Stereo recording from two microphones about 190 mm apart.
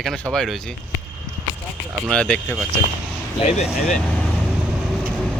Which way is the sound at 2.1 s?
5° left (ahead or behind).